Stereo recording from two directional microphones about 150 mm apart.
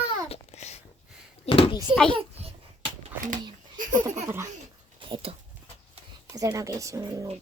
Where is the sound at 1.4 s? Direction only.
35° left (ahead or behind).